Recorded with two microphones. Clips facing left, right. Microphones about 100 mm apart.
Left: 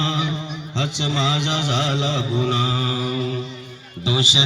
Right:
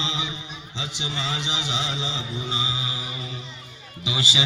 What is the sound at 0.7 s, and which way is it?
Speech, 70° left (ahead or behind).